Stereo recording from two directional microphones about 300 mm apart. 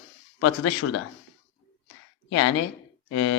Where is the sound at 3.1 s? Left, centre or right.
Left.